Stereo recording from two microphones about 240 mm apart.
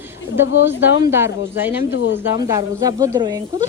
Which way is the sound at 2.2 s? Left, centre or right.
Centre.